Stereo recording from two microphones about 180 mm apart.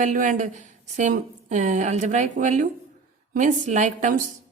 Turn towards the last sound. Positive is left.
turn(degrees=-45)  # may be behind; listen again after turning